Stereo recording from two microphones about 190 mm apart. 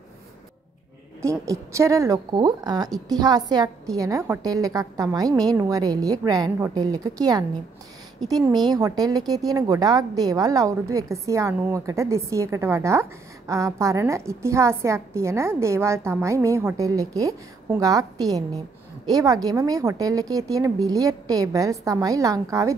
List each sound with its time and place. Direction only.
1.2 s a woman's voice: 15° right (ahead or behind)